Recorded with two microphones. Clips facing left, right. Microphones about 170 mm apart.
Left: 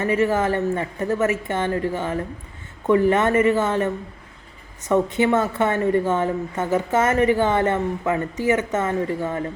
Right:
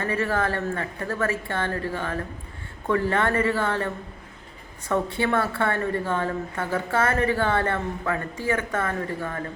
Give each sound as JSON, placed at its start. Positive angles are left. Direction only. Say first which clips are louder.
{"t": 0.0, "sound": "a woman's voice", "louder": "left 5 dB", "side_deg": 15}